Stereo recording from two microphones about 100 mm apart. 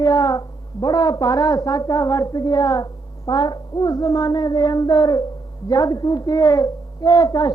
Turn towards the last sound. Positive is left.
turn(degrees=40)  # may be behind; listen again after turning